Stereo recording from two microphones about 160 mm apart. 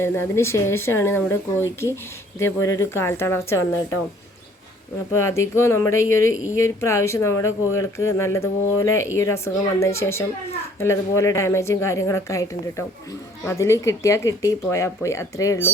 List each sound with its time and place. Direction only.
0.0 s speech: 15° left (ahead or behind)
5.1 s speech: 15° left (ahead or behind)